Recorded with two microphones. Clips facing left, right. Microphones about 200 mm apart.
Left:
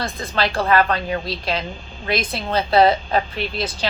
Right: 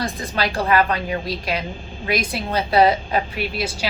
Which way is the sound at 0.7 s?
40° left (ahead or behind).